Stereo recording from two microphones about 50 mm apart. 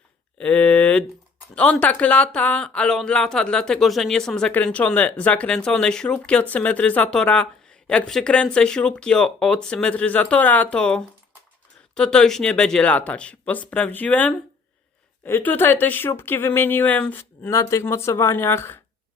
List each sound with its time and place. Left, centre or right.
0.3 s speech: left
2.6 s speech: centre
3.8 s speech: centre
4.1 s speech: centre
4.5 s speech: left
6.5 s speech: left
10.8 s speech: centre
12.9 s speech: left
16.8 s speech: left
17.5 s speech: left
17.8 s speech: left
18.4 s speech: left